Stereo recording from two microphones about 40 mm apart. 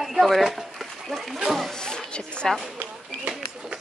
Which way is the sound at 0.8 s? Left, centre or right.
Centre.